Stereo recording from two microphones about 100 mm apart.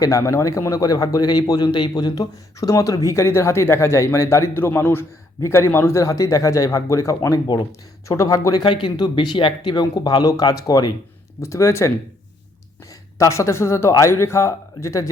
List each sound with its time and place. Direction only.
0.0 s speech: 35° left (ahead or behind)
8.6 s speech: 55° left (ahead or behind); by 11.9 s 30° left (ahead or behind)
12.9 s speech: 30° left (ahead or behind)